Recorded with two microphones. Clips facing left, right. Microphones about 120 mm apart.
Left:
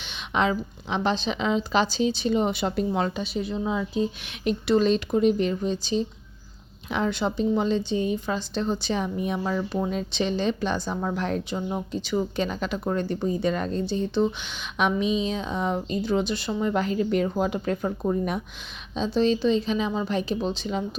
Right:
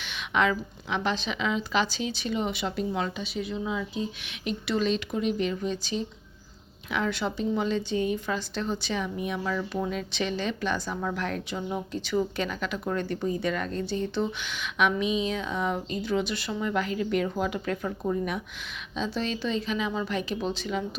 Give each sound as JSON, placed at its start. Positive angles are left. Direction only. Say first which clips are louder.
{"t": 0.0, "sound": "a woman's voice", "louder": "left 1 dB", "side_deg": 25}